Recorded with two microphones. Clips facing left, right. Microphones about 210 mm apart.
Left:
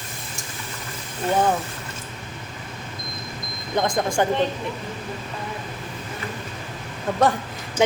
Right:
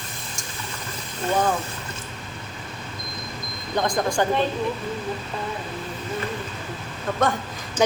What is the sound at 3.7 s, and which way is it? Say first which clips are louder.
Speech: left 1 dB; 25° left (ahead or behind).